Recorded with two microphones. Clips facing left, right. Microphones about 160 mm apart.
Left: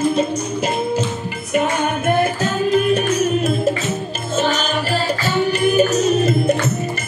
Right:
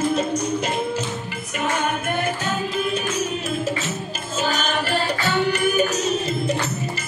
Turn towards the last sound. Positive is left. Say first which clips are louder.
# left 6 dB
turn(degrees=45)  # may be behind; listen again after turning